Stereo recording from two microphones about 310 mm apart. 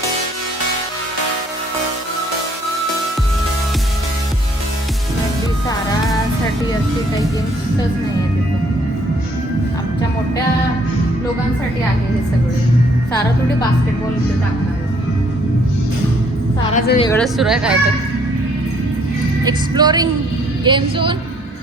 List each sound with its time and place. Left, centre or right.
16.7 s a woman's voice: left
17.0 s speech: centre
19.5 s speech: centre